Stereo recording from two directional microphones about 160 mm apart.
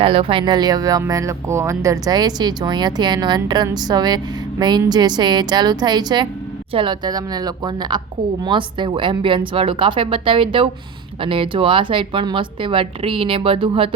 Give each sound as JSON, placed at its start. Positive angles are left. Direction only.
{"t": 0.0, "sound": "speech", "side_deg": -35}